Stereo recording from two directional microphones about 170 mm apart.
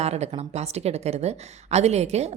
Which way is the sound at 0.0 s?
40° right (ahead or behind).